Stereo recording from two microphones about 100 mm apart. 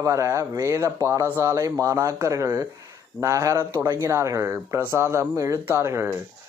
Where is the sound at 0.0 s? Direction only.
30° right (ahead or behind).